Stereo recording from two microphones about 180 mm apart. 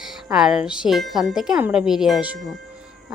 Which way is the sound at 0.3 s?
5° right (ahead or behind).